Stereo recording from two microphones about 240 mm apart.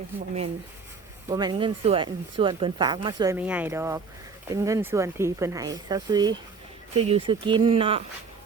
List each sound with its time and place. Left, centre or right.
1.3 s speech: centre